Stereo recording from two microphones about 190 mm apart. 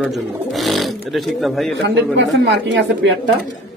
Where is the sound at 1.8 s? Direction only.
65° right (ahead or behind).